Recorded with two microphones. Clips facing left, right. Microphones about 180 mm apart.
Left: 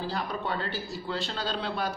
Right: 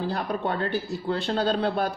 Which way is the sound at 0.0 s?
60° right (ahead or behind).